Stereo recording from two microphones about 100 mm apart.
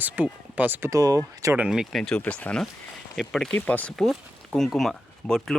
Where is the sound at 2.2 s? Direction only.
15° left (ahead or behind).